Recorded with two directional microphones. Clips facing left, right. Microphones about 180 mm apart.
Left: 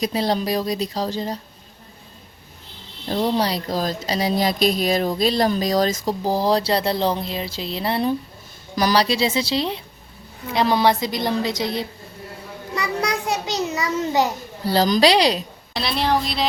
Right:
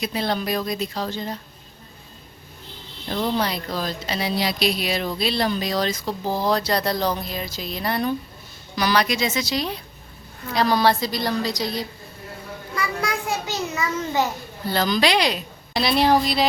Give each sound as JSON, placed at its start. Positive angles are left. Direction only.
{"t": 0.0, "sound": "speech", "side_deg": 35}
{"t": 3.1, "sound": "speech", "side_deg": 35}
{"t": 8.7, "sound": "a woman's voice", "side_deg": 40}
{"t": 12.7, "sound": "a sound", "side_deg": 20}
{"t": 14.6, "sound": "speech", "side_deg": 35}
{"t": 15.7, "sound": "a woman's voice", "side_deg": 0}